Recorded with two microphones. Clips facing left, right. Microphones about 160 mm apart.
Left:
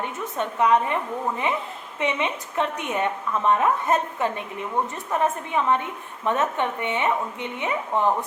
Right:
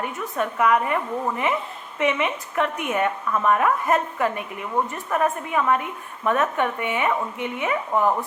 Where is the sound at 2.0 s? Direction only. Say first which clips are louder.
Right 3 dB; 20° left (ahead or behind).